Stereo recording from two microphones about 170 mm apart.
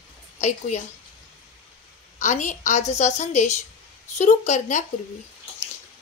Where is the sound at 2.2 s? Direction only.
45° left (ahead or behind).